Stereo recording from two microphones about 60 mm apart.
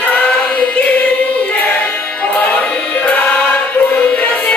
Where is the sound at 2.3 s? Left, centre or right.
Left.